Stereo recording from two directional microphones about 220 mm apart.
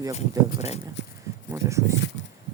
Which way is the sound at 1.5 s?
15° right (ahead or behind).